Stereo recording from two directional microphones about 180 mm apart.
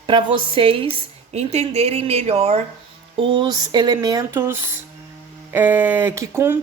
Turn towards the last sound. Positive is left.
turn(degrees=-15)  # may be behind; listen again after turning